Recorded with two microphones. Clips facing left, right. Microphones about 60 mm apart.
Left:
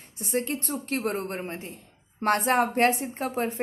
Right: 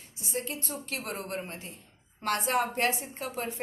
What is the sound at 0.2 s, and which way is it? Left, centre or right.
A woman's voice, left.